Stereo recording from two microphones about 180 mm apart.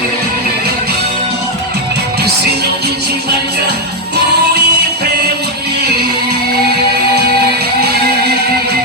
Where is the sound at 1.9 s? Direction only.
65° right (ahead or behind).